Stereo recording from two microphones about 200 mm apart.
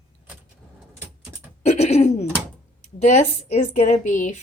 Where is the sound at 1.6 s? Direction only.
35° left (ahead or behind).